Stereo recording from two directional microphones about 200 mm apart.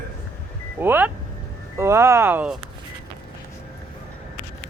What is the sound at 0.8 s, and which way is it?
Speech, 10° right (ahead or behind).